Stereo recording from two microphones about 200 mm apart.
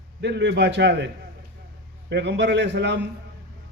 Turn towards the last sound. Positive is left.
turn(degrees=-60)  # may be behind; listen again after turning